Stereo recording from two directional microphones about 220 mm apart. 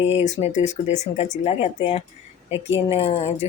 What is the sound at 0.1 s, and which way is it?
Speech, 30° left (ahead or behind).